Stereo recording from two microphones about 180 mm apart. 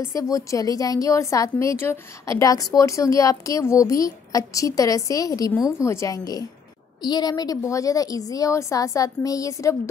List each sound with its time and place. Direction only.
0.0 s a woman's voice: 15° left (ahead or behind)